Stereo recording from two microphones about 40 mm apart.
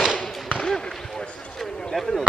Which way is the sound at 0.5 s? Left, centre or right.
Centre.